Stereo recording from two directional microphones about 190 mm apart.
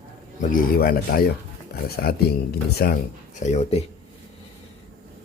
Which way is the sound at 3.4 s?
35° left (ahead or behind).